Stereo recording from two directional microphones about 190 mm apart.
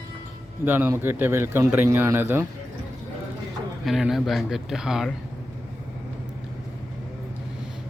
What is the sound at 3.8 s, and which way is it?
Speech, centre (ahead or behind).